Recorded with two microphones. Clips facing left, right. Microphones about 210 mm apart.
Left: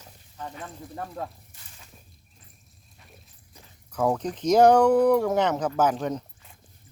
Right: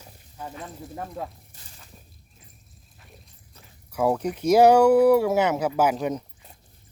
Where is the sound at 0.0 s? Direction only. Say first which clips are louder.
Even; 10° right (ahead or behind).